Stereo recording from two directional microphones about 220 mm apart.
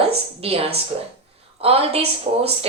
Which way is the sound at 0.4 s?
25° right (ahead or behind).